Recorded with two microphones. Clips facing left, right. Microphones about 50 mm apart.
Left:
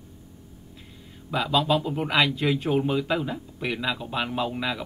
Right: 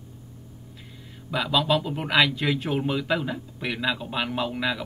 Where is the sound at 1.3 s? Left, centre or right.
Centre.